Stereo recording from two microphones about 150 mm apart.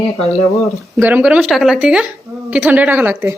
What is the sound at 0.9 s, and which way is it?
A woman's voice, 10° right (ahead or behind).